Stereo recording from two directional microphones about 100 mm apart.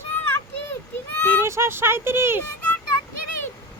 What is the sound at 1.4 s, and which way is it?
Speech, 25° right (ahead or behind).